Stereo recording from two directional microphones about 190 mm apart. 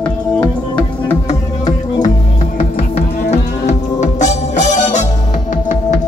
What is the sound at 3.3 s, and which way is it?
Music, 40° left (ahead or behind).